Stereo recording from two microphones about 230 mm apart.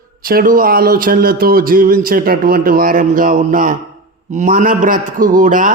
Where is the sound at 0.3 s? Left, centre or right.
Right.